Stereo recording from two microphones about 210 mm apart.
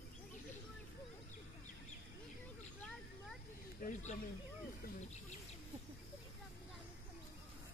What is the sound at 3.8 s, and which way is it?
Speech, 35° left (ahead or behind).